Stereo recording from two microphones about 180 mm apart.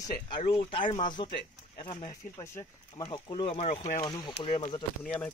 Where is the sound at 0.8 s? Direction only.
45° left (ahead or behind).